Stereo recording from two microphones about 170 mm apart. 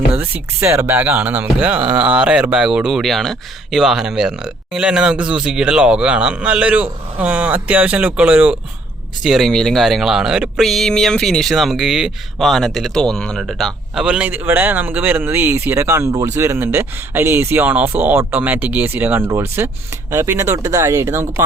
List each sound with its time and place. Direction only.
0.2 s speech: 10° right (ahead or behind)